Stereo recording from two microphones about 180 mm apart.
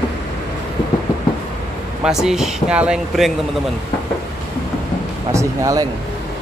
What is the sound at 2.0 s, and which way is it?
Speech, 5° right (ahead or behind).